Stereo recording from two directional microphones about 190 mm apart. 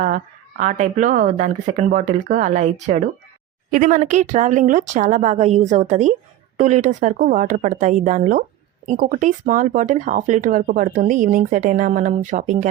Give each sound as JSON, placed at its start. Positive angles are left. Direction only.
{"t": 0.6, "sound": "speech", "side_deg": -40}